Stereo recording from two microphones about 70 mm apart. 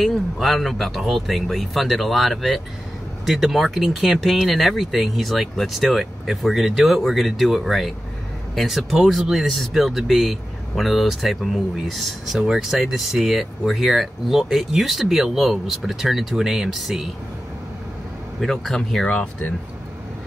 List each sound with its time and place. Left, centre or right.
0.0 s speech: centre
18.4 s speech: centre
19.0 s speech: centre